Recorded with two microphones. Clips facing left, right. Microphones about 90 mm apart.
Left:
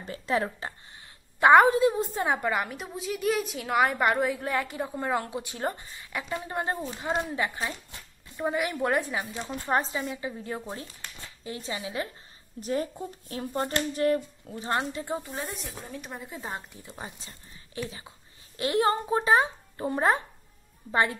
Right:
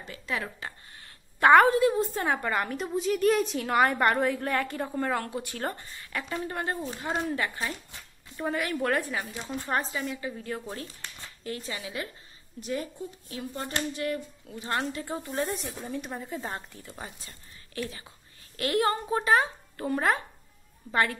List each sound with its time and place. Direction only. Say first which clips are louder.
0.0 s speech: left 6 dB; 35° left (ahead or behind)
1.0 s a woman's voice: left 1 dB; 15° left (ahead or behind)
12.5 s speech: left 3 dB; 40° left (ahead or behind)
14.7 s speech: left 2 dB; 20° left (ahead or behind)
15.3 s speech: right 5 dB; centre (ahead or behind)
16.5 s a woman's voice: even; 15° left (ahead or behind)